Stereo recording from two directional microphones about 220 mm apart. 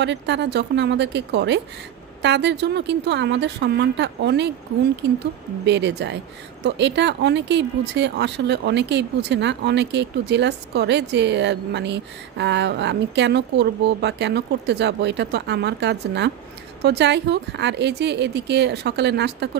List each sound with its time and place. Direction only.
0.0 s speech: 50° right (ahead or behind)
5.7 s speech: 50° right (ahead or behind)